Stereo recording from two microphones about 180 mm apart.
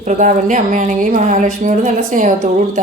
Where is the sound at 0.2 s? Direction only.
45° right (ahead or behind).